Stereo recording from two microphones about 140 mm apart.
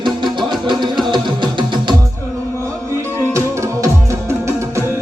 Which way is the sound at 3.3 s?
20° right (ahead or behind).